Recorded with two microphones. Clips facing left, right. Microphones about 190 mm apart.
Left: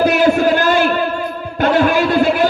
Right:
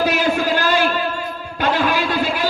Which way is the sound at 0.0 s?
55° left (ahead or behind).